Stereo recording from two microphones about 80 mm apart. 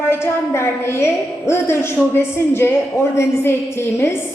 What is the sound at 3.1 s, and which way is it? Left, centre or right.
Speech, left.